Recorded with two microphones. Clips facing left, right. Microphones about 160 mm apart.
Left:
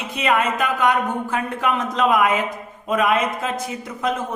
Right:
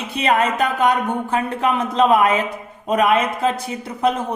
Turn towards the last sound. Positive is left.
turn(degrees=-30)  # may be behind; listen again after turning